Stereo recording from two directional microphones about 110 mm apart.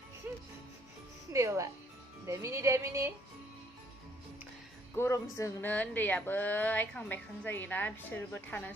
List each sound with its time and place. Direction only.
1.3 s speech: 30° right (ahead or behind)
4.9 s speech: 25° left (ahead or behind)
5.7 s a woman's voice: 15° left (ahead or behind)